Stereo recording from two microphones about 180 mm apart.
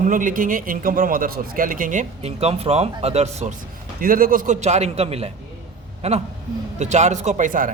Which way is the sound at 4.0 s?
50° right (ahead or behind).